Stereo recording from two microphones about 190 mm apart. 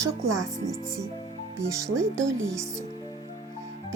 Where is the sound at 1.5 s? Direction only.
15° right (ahead or behind).